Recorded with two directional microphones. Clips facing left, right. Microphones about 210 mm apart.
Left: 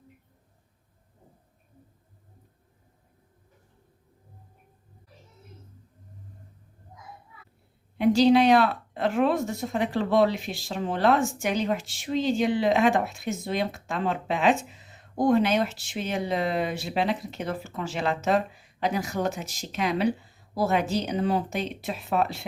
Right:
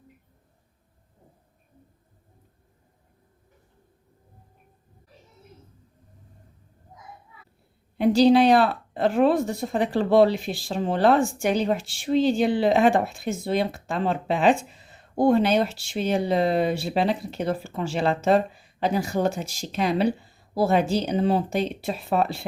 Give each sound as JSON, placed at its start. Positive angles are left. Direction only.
{"t": 7.9, "sound": "speech", "side_deg": -35}